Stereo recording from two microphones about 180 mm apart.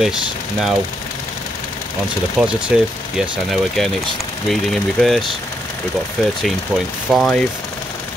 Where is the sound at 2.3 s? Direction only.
5° right (ahead or behind).